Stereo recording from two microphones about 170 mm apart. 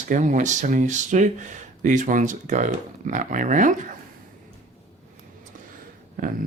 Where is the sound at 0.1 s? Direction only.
50° right (ahead or behind).